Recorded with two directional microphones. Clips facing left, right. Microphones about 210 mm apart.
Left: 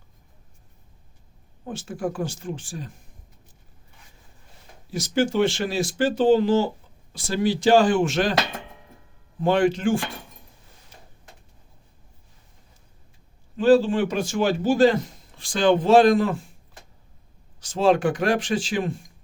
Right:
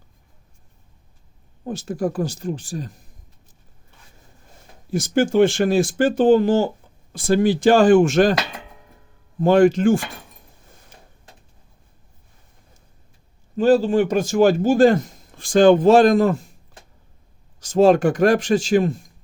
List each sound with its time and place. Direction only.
1.6 s speech: 40° right (ahead or behind)
4.9 s speech: 50° right (ahead or behind)
9.4 s speech: 45° right (ahead or behind)
13.6 s a man's voice: 45° right (ahead or behind)
17.6 s speech: 45° right (ahead or behind)